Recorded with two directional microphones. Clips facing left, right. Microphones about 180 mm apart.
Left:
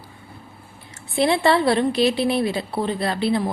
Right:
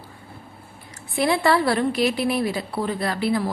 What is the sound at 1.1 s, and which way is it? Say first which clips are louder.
Speech: left 2 dB; 25° left (ahead or behind).